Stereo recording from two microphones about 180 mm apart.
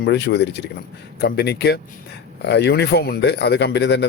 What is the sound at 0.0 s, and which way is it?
Speech, 70° left (ahead or behind).